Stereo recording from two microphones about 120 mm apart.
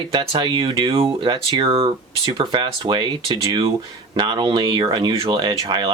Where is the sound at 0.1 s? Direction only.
40° right (ahead or behind).